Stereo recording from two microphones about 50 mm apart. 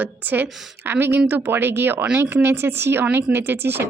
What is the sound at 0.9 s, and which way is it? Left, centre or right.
A woman's voice, right.